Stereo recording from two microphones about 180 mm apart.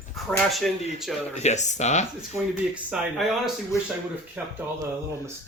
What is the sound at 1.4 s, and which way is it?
Speech, 40° left (ahead or behind).